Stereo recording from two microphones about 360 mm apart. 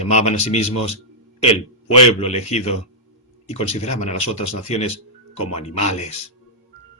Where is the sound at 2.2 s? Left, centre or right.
Centre.